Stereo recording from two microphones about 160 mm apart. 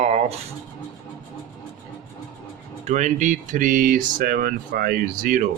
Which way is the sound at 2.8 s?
45° right (ahead or behind).